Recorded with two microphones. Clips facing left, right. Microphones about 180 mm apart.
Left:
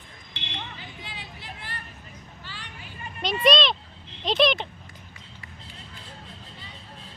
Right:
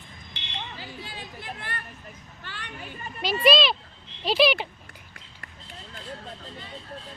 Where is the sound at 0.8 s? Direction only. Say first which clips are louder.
Right 3 dB; 40° right (ahead or behind); by 2.6 s 55° right (ahead or behind).